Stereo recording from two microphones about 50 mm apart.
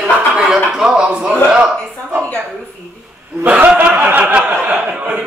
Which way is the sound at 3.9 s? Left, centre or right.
Right.